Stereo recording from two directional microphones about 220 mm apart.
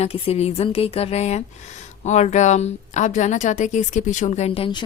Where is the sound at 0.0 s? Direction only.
30° left (ahead or behind).